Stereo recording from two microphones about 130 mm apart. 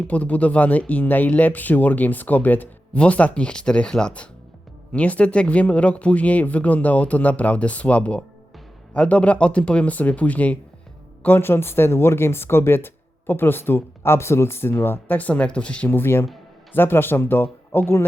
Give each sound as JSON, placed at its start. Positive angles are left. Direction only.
{"t": 0.1, "sound": "speech", "side_deg": 10}